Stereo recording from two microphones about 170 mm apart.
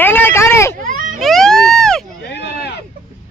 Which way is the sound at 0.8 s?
50° right (ahead or behind).